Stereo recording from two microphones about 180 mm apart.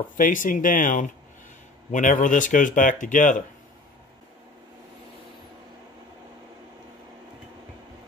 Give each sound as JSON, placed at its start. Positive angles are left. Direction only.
{"t": 0.2, "sound": "speech", "side_deg": 50}